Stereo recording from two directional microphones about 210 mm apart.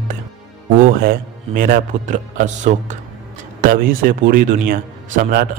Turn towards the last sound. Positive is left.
turn(degrees=-40)  # may be behind; listen again after turning